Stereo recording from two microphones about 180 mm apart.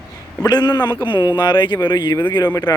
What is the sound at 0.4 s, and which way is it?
Speech, 25° left (ahead or behind).